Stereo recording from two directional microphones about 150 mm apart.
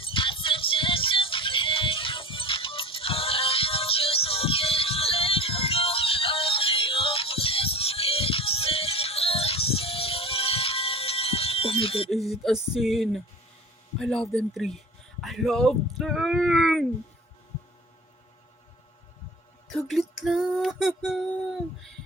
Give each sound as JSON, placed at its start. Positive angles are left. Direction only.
{"t": 0.0, "sound": "music", "side_deg": 35}
{"t": 12.1, "sound": "male singing", "side_deg": 0}
{"t": 19.7, "sound": "male singing", "side_deg": 0}